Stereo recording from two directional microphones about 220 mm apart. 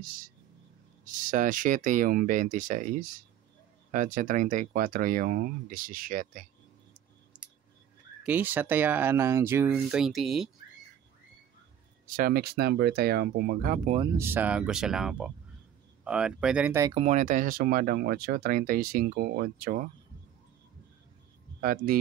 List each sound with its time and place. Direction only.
1.0 s speech: 35° right (ahead or behind)
7.3 s scissors: 5° right (ahead or behind)
8.2 s speech: 10° right (ahead or behind)
12.2 s speech: 45° right (ahead or behind)
13.9 s speech: 15° right (ahead or behind)
16.9 s speech: 30° right (ahead or behind)
21.5 s speech: 40° right (ahead or behind)